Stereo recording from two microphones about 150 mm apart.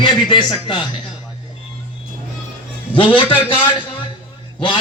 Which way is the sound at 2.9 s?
35° left (ahead or behind).